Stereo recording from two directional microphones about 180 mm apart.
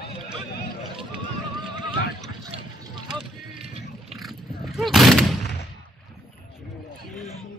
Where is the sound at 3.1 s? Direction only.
Centre (ahead or behind).